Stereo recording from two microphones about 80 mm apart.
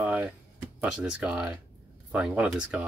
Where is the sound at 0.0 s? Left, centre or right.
Right.